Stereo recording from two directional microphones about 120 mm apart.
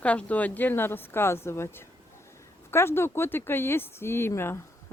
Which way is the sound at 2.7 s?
20° left (ahead or behind).